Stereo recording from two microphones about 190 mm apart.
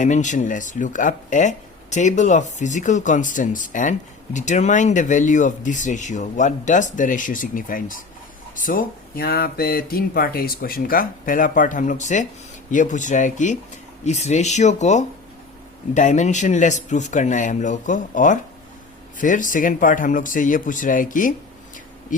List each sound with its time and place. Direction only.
0.0 s speech: 40° left (ahead or behind)